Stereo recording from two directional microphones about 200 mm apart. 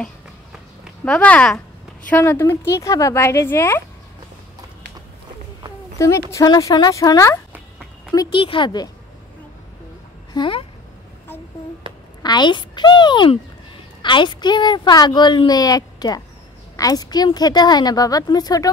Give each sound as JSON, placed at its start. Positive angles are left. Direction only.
{"t": 1.0, "sound": "speech", "side_deg": 5}
{"t": 5.9, "sound": "a woman's voice", "side_deg": 15}
{"t": 10.3, "sound": "speech", "side_deg": 25}
{"t": 12.2, "sound": "a woman's voice", "side_deg": 20}